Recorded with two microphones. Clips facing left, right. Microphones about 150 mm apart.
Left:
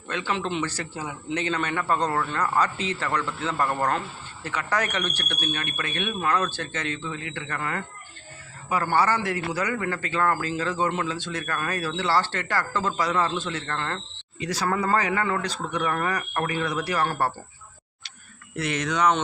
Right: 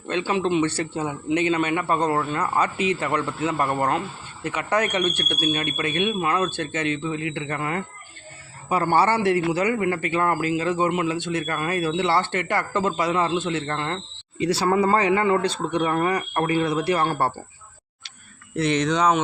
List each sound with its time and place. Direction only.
0.1 s a man's voice: 15° right (ahead or behind)
0.8 s a man's voice: 25° right (ahead or behind)
1.4 s a man's voice: 15° right (ahead or behind)
14.3 s a man's voice: 30° right (ahead or behind)
18.5 s speech: 35° right (ahead or behind)